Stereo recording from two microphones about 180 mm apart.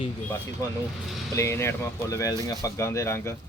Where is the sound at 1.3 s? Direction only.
15° left (ahead or behind).